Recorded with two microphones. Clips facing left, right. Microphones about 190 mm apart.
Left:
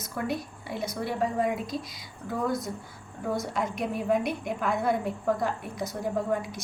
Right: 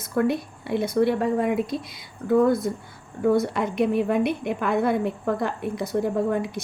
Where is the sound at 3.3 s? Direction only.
65° right (ahead or behind).